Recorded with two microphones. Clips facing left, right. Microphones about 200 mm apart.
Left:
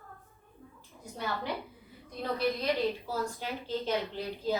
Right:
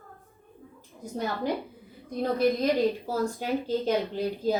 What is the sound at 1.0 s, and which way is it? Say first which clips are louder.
Speech: right 6 dB; 45° right (ahead or behind).